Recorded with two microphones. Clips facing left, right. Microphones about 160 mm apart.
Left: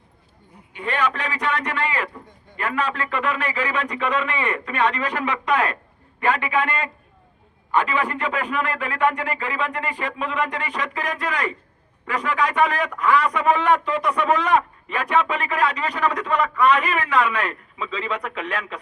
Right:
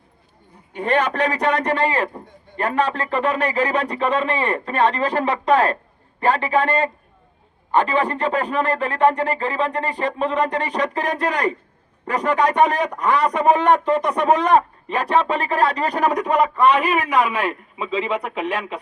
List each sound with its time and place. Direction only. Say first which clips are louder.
0.7 s a man's voice: right 4 dB; 45° right (ahead or behind)
16.8 s a man's voice: right 2 dB; 10° right (ahead or behind)